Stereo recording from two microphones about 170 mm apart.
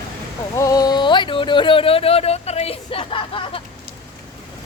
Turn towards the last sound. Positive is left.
turn(degrees=30)  # may be behind; listen again after turning